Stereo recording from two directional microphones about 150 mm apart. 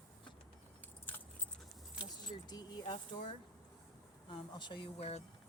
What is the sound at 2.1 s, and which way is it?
Speech, 25° left (ahead or behind).